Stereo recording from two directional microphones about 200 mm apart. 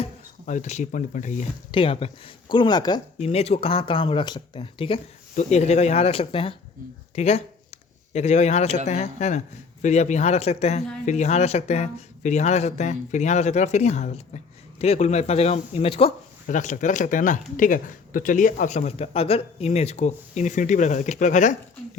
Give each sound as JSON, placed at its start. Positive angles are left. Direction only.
{"t": 0.0, "sound": "speech", "side_deg": 35}
{"t": 1.7, "sound": "speech", "side_deg": 25}
{"t": 3.2, "sound": "speech", "side_deg": 30}